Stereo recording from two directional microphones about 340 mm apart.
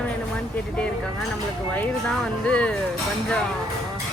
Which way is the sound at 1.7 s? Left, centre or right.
Centre.